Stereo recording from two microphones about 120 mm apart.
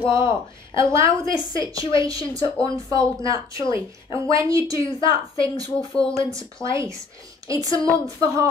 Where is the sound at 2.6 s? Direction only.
45° left (ahead or behind).